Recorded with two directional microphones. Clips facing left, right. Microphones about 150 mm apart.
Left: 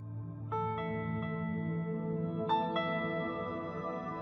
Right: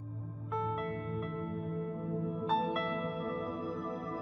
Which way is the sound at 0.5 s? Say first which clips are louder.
Even; centre (ahead or behind).